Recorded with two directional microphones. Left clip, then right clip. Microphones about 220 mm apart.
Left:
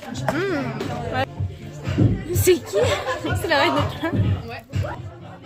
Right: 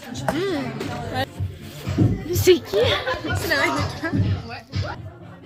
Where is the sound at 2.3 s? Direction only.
Centre (ahead or behind).